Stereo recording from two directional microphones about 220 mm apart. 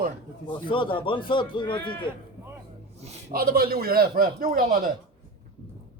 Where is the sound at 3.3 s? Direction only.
45° right (ahead or behind).